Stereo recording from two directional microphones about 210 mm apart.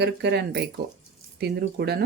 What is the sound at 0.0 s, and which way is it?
Speech, 55° right (ahead or behind).